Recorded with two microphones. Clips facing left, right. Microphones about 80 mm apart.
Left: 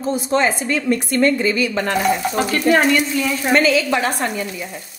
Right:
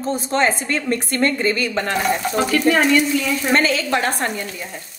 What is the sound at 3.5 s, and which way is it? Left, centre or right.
Speech, right.